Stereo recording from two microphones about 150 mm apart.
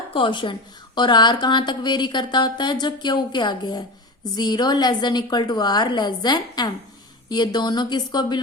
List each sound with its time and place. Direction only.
0.1 s a woman's voice: 35° left (ahead or behind)